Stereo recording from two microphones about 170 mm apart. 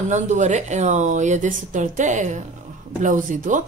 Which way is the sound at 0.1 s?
45° right (ahead or behind).